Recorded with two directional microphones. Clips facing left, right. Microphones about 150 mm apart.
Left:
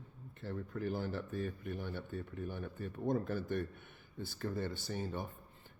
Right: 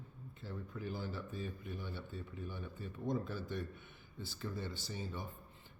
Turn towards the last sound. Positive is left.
turn(degrees=55)  # may be behind; listen again after turning